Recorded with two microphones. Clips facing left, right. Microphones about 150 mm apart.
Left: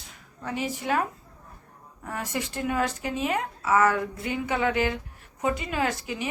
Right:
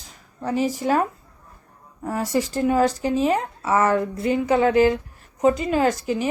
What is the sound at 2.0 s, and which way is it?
Speech, 35° right (ahead or behind).